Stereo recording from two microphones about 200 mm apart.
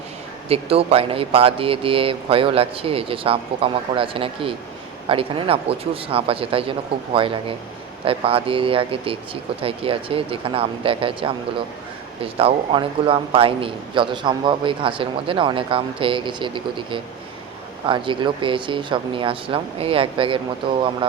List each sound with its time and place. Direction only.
0.4 s a man's voice: 30° right (ahead or behind)